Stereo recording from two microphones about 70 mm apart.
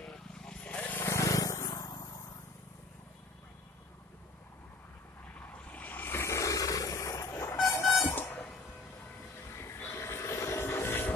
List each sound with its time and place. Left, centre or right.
0.0 s vehicle: centre
0.9 s vehicle: left
1.2 s vehicle: left
5.5 s a sound: left
8.1 s a sound: left
9.5 s vehicle: left